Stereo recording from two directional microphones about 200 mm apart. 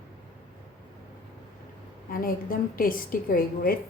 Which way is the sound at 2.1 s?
45° left (ahead or behind).